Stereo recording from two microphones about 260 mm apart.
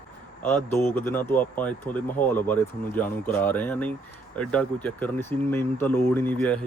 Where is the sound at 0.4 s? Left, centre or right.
Centre.